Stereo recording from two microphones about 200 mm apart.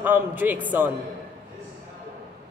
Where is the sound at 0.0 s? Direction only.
10° right (ahead or behind).